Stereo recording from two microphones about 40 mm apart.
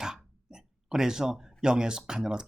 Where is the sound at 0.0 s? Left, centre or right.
Centre.